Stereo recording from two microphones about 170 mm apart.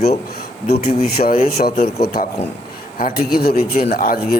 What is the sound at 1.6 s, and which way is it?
Speech, 50° left (ahead or behind).